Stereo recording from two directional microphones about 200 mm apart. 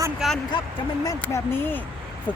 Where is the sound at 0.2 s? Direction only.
Centre (ahead or behind).